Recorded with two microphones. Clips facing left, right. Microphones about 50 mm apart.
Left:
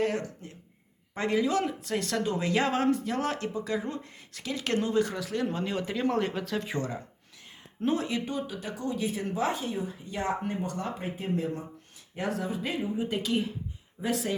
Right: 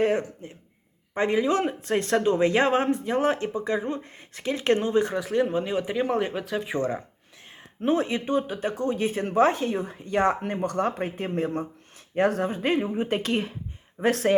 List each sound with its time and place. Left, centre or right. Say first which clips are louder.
0.0 s speech: right 6 dB; right
5.5 s speech: right 5 dB; centre
7.8 s speech: right 4 dB; right